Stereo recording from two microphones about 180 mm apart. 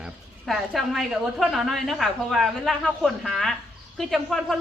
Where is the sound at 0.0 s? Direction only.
Centre (ahead or behind).